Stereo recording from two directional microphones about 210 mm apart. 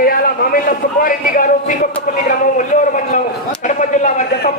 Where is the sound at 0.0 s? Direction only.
45° left (ahead or behind).